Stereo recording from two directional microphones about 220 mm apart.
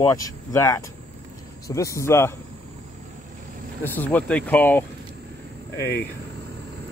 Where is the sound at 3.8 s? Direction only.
10° left (ahead or behind).